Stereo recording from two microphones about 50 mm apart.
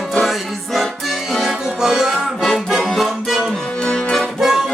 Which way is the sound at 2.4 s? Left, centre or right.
Centre.